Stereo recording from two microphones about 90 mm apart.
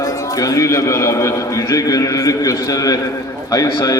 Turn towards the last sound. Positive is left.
turn(degrees=45)  # may be behind; listen again after turning